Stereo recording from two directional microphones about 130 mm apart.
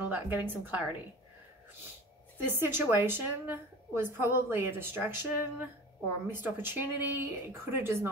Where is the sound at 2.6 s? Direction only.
15° right (ahead or behind).